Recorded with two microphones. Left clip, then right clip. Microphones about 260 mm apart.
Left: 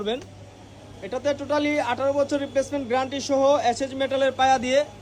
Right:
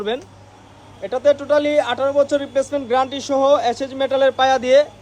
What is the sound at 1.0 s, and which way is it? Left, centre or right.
A man's voice, right.